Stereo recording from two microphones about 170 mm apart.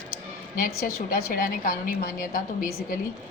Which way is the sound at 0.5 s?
55° left (ahead or behind).